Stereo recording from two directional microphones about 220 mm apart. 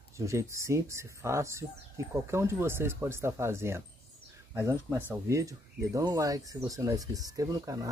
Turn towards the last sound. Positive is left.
turn(degrees=-15)  # may be behind; listen again after turning